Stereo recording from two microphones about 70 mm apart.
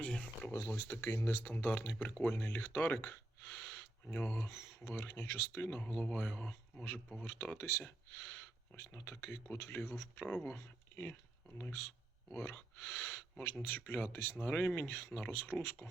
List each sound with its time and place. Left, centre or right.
0.0 s speech: centre
0.5 s speech: left
6.0 s speech: centre
7.3 s speech: left
7.6 s speech: left
10.2 s speech: centre
10.5 s speech: left
14.4 s speech: left